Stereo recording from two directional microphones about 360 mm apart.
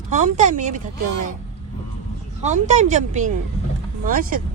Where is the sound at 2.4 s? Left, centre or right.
Centre.